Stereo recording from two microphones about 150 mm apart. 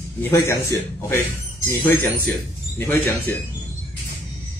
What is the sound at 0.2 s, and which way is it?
Speech, 20° left (ahead or behind).